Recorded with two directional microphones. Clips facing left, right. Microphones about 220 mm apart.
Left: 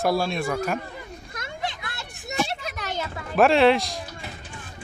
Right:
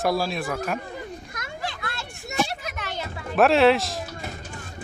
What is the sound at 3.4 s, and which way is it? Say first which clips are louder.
Speech: even; centre (ahead or behind).